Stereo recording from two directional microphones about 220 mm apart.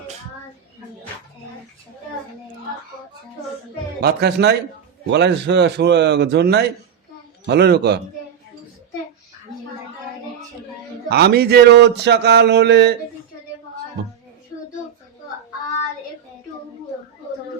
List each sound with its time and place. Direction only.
4.0 s mantra: 45° right (ahead or behind)
11.1 s mantra: 45° right (ahead or behind)